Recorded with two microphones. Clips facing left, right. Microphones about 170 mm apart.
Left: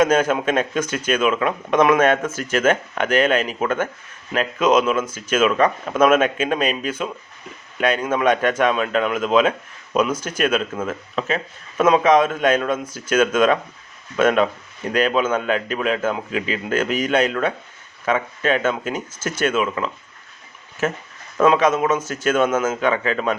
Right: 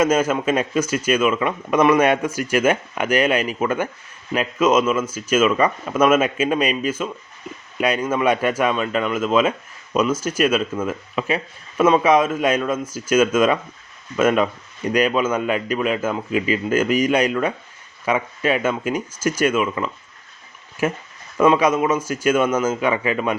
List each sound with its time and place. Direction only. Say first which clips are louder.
0.0 s a man's voice: left 1 dB; 5° right (ahead or behind)